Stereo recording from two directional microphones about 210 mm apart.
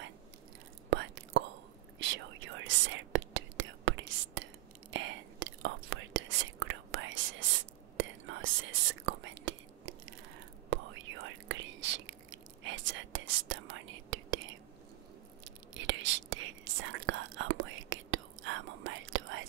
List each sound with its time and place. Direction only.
0.8 s whispering: 55° right (ahead or behind)
12.6 s whispering: 65° right (ahead or behind)
15.7 s whispering: 60° right (ahead or behind)